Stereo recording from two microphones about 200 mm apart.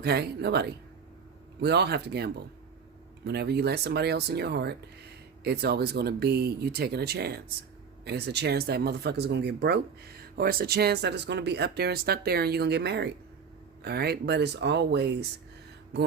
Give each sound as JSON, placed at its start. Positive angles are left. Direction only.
{"t": 0.0, "sound": "speech", "side_deg": -55}